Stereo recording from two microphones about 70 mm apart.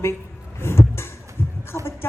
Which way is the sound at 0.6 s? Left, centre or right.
Left.